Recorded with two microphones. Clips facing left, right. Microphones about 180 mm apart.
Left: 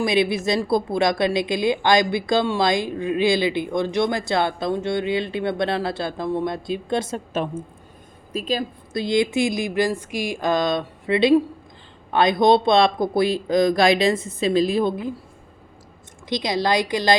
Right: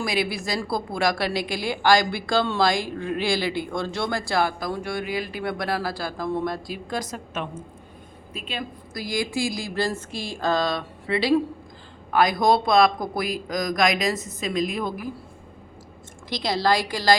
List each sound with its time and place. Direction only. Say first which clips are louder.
0.0 s a woman's voice: left 6 dB; 20° left (ahead or behind)
8.3 s a woman's voice: left 9 dB; 40° left (ahead or behind)
9.0 s a woman's voice: left 7 dB; 25° left (ahead or behind)
16.3 s a woman's voice: left 2 dB; 15° left (ahead or behind)